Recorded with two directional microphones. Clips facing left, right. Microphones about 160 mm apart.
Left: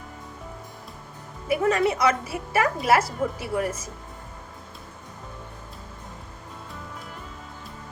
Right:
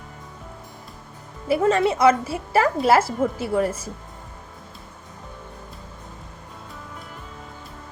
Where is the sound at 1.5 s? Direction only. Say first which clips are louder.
Right 3 dB; 25° right (ahead or behind).